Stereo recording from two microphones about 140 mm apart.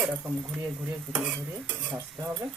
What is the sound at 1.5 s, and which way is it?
Speech, 10° right (ahead or behind).